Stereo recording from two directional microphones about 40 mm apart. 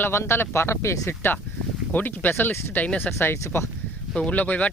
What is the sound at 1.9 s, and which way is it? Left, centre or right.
Speech, left.